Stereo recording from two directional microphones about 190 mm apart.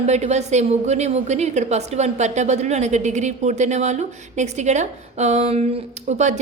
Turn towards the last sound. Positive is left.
turn(degrees=-35)  # may be behind; listen again after turning